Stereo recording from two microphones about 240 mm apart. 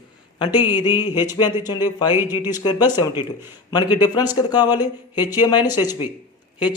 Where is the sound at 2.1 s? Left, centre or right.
Centre.